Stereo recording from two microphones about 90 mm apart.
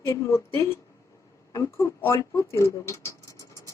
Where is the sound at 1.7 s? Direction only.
30° left (ahead or behind).